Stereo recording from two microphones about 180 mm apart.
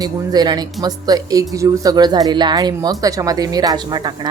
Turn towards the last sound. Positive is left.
turn(degrees=-25)  # may be behind; listen again after turning